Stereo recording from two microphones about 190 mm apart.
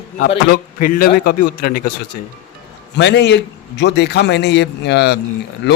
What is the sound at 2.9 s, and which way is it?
A man's voice, 65° left (ahead or behind).